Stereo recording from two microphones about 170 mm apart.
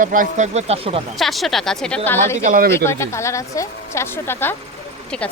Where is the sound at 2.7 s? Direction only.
15° left (ahead or behind).